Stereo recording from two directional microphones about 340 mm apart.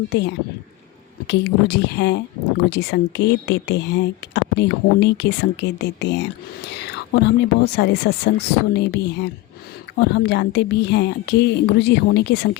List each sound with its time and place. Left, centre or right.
0.1 s speech: left